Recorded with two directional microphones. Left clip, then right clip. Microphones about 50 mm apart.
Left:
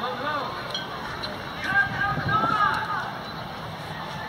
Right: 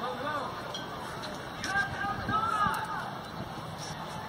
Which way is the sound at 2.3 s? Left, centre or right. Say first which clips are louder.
Left 6 dB; centre.